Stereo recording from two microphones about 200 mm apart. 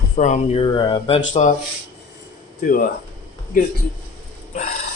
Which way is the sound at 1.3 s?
40° left (ahead or behind).